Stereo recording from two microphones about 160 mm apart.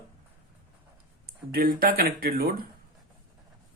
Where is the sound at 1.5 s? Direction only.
65° right (ahead or behind).